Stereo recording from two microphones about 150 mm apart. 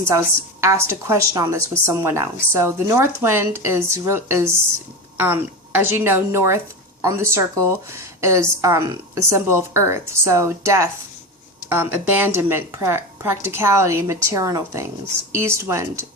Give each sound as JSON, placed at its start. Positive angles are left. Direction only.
{"t": 0.0, "sound": "a woman's voice", "side_deg": -20}